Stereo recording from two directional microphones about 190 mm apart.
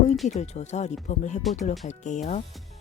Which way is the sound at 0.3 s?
35° left (ahead or behind).